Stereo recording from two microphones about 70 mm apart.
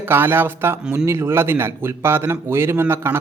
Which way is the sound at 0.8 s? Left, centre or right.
Centre.